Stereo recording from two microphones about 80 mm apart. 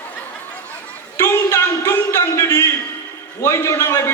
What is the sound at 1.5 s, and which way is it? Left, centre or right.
A man's voice, left.